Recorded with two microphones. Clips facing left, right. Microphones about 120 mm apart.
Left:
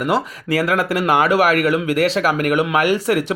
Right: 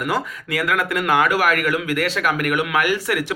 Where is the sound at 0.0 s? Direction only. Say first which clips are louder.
Left 4 dB; 35° left (ahead or behind).